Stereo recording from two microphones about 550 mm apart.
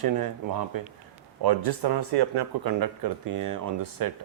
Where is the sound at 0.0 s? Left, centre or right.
Right.